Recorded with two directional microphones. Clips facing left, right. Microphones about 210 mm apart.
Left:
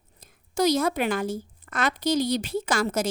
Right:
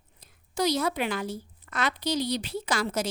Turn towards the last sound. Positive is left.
turn(degrees=50)  # may be behind; listen again after turning